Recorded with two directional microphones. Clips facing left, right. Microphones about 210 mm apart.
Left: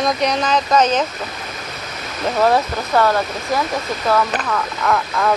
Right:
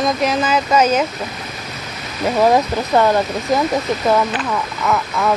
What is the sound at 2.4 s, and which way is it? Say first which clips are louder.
Speech: right 2 dB; 15° right (ahead or behind).